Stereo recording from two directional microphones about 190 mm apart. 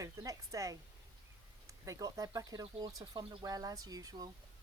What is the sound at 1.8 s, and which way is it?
Speech, 15° right (ahead or behind).